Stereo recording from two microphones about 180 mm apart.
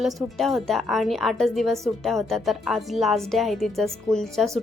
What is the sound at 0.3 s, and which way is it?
A woman's voice, centre (ahead or behind).